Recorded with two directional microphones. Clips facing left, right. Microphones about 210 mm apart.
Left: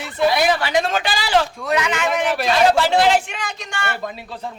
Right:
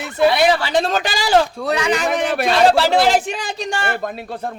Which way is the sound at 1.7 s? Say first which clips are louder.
Right 1 dB; 30° right (ahead or behind).